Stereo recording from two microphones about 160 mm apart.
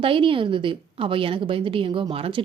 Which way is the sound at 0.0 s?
35° right (ahead or behind).